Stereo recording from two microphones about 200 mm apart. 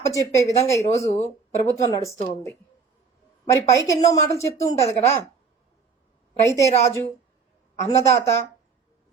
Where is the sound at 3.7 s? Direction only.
15° left (ahead or behind).